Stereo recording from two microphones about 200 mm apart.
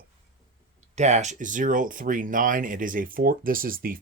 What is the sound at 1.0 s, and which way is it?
Speech, 35° right (ahead or behind).